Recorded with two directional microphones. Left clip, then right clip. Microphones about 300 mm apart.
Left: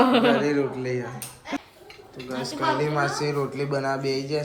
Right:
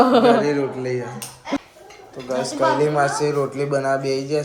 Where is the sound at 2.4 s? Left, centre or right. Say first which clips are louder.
Right 6 dB; right.